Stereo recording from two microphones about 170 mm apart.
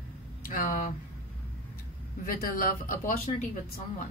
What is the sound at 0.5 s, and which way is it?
Speech, 55° left (ahead or behind).